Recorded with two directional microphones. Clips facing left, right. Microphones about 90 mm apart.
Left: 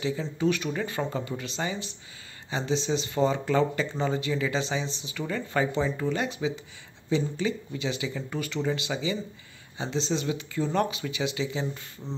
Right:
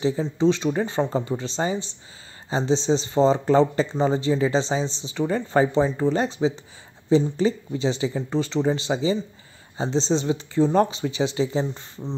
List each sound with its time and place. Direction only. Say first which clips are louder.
0.2 s speech: right 6 dB; 25° right (ahead or behind)